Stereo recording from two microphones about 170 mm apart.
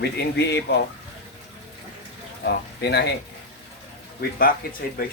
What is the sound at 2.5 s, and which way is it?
Speech, 75° left (ahead or behind).